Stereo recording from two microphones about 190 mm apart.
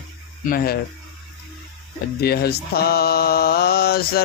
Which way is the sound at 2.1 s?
55° left (ahead or behind).